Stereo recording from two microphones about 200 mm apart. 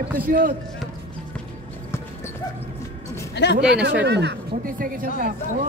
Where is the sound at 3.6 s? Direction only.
5° right (ahead or behind).